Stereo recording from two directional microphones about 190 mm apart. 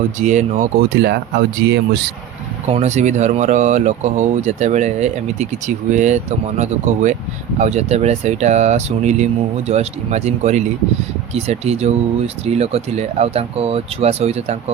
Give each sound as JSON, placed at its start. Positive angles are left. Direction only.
{"t": 0.2, "sound": "speech", "side_deg": -40}
{"t": 1.0, "sound": "speech", "side_deg": -60}
{"t": 2.6, "sound": "speech", "side_deg": -35}